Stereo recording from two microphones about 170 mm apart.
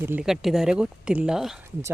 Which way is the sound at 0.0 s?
15° right (ahead or behind).